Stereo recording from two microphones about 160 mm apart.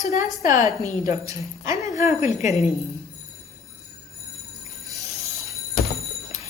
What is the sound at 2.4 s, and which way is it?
Speech, 45° left (ahead or behind).